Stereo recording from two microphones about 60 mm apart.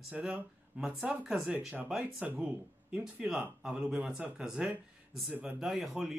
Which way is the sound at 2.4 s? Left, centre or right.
Right.